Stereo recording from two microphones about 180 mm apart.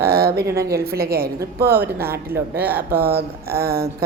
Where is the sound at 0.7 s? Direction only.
60° right (ahead or behind).